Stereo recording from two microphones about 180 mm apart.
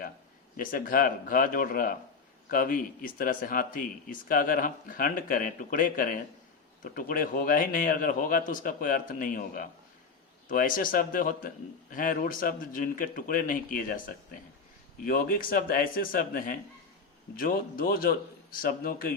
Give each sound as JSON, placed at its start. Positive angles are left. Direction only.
{"t": 0.5, "sound": "a man's voice", "side_deg": 50}